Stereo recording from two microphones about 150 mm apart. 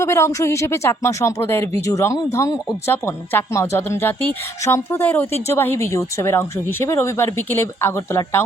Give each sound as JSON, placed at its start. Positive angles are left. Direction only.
{"t": 0.0, "sound": "speech", "side_deg": 20}